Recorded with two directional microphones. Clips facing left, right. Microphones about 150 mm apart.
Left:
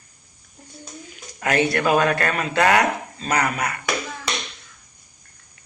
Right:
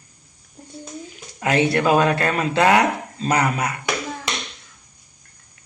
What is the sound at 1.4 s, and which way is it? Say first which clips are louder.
Speech: right 2 dB; 25° right (ahead or behind).